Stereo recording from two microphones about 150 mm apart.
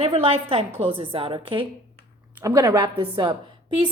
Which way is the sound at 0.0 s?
40° right (ahead or behind).